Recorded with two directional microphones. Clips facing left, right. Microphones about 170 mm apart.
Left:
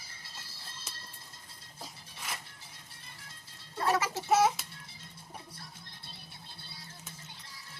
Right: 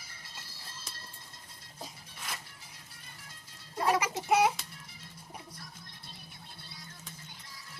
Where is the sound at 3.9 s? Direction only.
15° right (ahead or behind).